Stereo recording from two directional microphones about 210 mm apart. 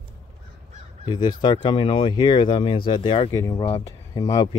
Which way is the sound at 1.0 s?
20° left (ahead or behind).